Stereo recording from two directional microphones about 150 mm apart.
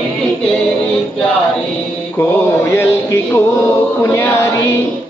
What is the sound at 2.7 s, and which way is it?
Speech, 15° left (ahead or behind).